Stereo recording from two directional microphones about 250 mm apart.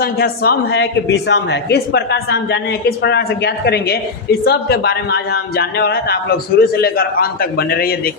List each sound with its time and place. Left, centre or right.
0.0 s a woman's voice: left